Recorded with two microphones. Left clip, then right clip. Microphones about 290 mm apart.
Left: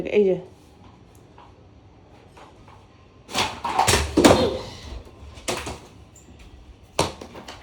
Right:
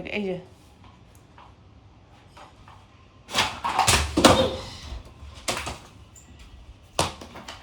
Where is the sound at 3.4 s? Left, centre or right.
Right.